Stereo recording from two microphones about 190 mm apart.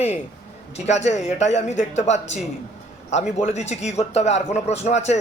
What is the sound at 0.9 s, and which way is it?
Speech, 35° left (ahead or behind).